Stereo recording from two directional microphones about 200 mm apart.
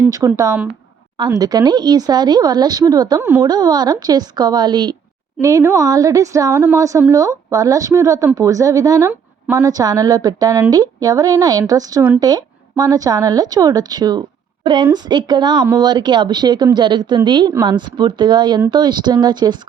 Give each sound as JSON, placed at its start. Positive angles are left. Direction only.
{"t": 0.0, "sound": "a woman's voice", "side_deg": -15}